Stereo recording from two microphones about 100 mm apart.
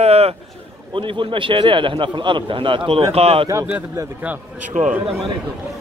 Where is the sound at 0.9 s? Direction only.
60° right (ahead or behind); by 3.4 s 80° right.